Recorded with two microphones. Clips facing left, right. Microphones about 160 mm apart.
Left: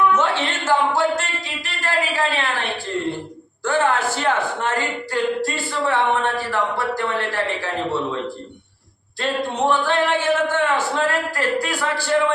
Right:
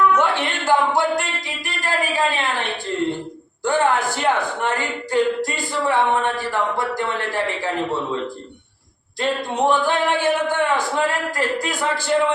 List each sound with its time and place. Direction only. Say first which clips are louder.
0.2 s a sound: right 1 dB; 15° right (ahead or behind)
3.6 s a man's voice: right 1 dB; 15° right (ahead or behind)
9.2 s a man's voice: right 1 dB; 15° right (ahead or behind)